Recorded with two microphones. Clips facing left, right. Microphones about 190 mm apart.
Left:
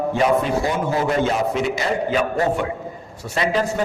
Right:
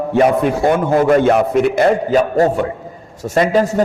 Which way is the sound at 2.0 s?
40° right (ahead or behind).